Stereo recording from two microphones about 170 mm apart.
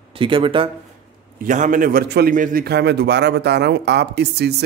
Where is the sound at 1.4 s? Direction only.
50° right (ahead or behind).